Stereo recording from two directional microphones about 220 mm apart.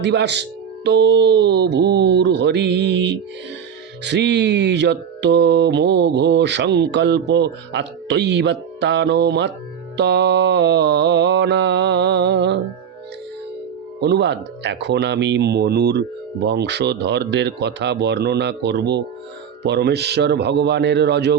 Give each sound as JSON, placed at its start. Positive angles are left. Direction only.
{"t": 0.0, "sound": "speech", "side_deg": -50}
{"t": 14.0, "sound": "speech", "side_deg": -50}